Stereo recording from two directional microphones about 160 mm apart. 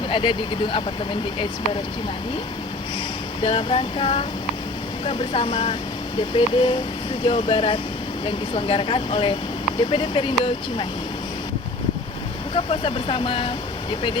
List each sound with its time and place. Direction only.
0.1 s speech: 30° left (ahead or behind)
3.4 s speech: 35° left (ahead or behind)
12.5 s speech: 35° left (ahead or behind)